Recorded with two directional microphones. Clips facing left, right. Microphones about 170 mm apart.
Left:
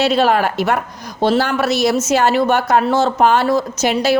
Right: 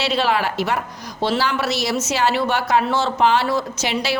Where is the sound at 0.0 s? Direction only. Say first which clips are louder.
Left 6 dB; 45° left (ahead or behind).